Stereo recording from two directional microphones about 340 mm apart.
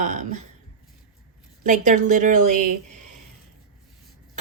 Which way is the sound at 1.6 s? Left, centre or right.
Right.